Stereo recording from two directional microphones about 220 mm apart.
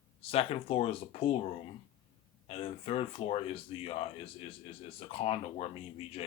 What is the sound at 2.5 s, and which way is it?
Speech, 25° left (ahead or behind).